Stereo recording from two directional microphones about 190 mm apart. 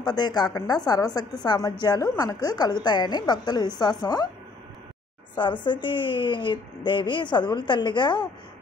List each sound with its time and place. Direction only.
0.0 s a woman's voice: 20° left (ahead or behind)
5.4 s a woman's voice: 25° left (ahead or behind)